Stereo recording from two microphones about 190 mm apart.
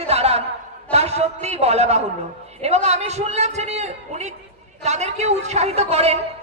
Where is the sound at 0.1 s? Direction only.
35° right (ahead or behind).